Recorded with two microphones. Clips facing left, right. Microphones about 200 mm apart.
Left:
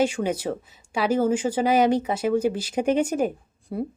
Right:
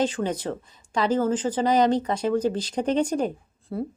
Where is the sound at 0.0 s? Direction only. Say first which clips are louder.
Left 2 dB; 10° left (ahead or behind).